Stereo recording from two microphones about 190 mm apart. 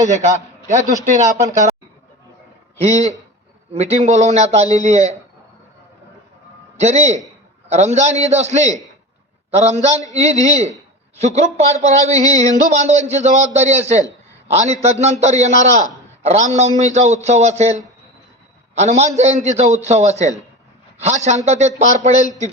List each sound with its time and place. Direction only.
0.0 s a man's voice: 40° right (ahead or behind)
2.7 s speech: 35° right (ahead or behind)
6.7 s a man's voice: 40° right (ahead or behind)